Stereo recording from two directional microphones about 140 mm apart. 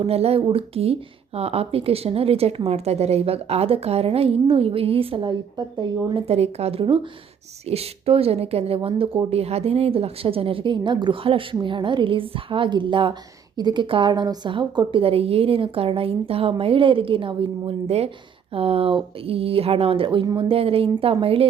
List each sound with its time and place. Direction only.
0.0 s a woman's voice: 45° right (ahead or behind)
6.2 s a woman's voice: 50° right (ahead or behind)